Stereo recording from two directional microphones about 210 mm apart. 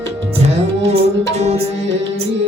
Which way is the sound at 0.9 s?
30° right (ahead or behind).